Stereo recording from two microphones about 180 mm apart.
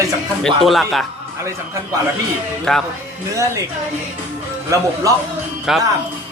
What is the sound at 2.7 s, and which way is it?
Speech, centre (ahead or behind).